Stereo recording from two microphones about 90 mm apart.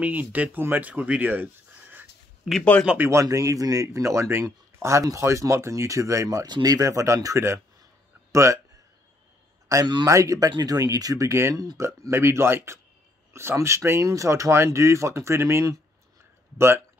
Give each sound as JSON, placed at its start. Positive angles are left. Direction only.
{"t": 0.0, "sound": "speech", "side_deg": -20}
{"t": 3.0, "sound": "speech", "side_deg": -30}
{"t": 6.4, "sound": "speech", "side_deg": -50}
{"t": 9.7, "sound": "a man's voice", "side_deg": -35}